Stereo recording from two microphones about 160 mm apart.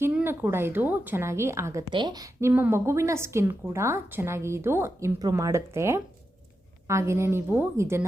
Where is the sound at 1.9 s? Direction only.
30° right (ahead or behind).